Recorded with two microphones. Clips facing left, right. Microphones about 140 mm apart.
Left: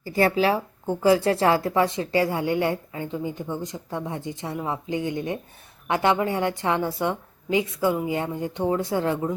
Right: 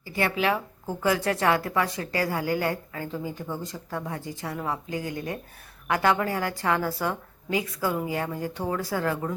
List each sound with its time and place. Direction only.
0.0 s speech: 35° left (ahead or behind)